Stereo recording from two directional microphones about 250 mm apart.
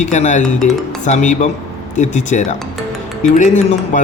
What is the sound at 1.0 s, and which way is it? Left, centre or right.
Speech, left.